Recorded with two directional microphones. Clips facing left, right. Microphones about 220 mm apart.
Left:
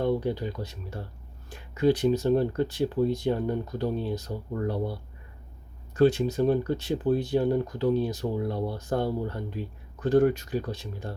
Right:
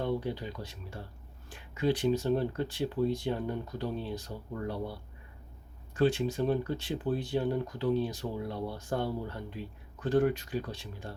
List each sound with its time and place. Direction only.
0.0 s speech: 45° left (ahead or behind)
6.0 s speech: 40° left (ahead or behind)